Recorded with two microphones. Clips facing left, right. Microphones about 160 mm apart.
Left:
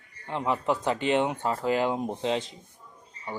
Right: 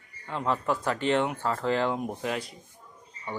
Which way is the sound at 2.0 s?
25° left (ahead or behind).